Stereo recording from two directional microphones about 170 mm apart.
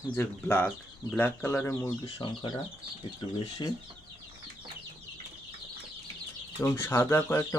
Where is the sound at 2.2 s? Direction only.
25° left (ahead or behind).